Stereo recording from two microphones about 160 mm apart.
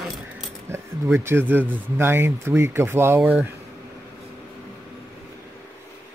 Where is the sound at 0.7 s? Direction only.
15° right (ahead or behind).